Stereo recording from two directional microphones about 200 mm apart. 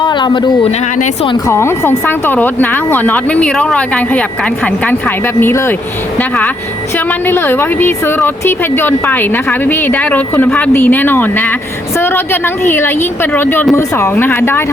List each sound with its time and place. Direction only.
0.0 s speech: 20° left (ahead or behind)
1.5 s a woman's voice: 15° left (ahead or behind)